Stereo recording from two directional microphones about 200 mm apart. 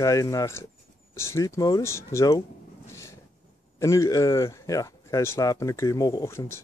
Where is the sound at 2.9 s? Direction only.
15° left (ahead or behind).